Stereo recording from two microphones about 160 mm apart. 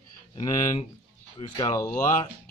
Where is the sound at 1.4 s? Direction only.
30° left (ahead or behind).